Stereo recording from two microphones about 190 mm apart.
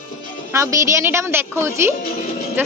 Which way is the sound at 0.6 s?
15° right (ahead or behind).